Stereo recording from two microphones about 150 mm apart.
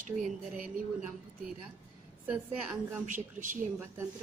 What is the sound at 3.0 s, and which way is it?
Speech, 60° right (ahead or behind).